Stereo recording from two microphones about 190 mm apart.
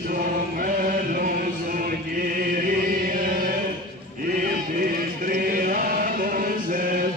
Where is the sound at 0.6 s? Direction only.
45° right (ahead or behind).